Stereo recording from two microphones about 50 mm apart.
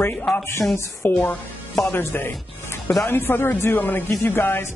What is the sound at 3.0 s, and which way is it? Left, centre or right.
A woman's voice, left.